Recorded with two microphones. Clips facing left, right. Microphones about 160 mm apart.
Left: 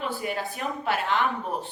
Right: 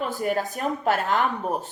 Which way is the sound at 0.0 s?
45° right (ahead or behind).